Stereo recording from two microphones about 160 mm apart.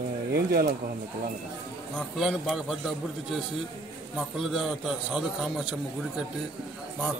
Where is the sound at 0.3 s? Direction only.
75° right (ahead or behind).